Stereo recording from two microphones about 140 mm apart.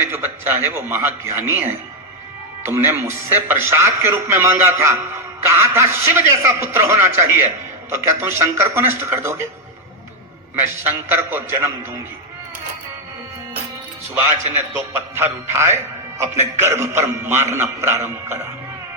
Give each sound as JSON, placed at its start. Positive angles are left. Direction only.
{"t": 0.0, "sound": "speech", "side_deg": -15}
{"t": 2.6, "sound": "speech", "side_deg": -15}
{"t": 10.5, "sound": "speech", "side_deg": -15}
{"t": 14.5, "sound": "a man's voice", "side_deg": -15}